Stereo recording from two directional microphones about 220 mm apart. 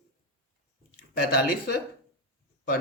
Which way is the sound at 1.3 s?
45° left (ahead or behind).